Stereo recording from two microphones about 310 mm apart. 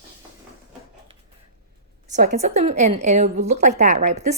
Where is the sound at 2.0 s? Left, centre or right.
Right.